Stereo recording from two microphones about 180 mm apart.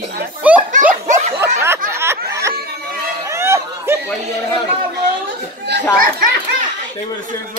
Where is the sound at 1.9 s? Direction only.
15° right (ahead or behind).